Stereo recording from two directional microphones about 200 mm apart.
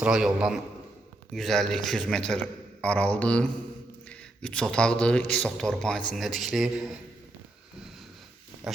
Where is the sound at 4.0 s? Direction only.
5° left (ahead or behind).